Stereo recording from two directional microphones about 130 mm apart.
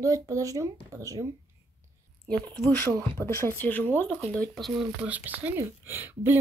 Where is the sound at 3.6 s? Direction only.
15° left (ahead or behind).